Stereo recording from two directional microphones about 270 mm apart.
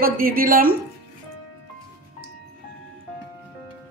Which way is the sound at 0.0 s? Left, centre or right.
Right.